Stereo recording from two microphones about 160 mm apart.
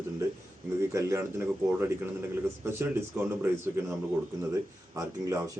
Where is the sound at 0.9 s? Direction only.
20° right (ahead or behind).